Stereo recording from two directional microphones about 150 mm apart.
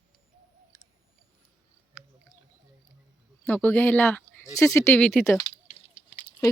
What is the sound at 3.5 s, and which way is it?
Speech, 10° left (ahead or behind).